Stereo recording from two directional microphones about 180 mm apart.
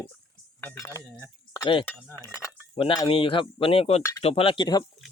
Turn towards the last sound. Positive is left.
turn(degrees=25)  # may be behind; listen again after turning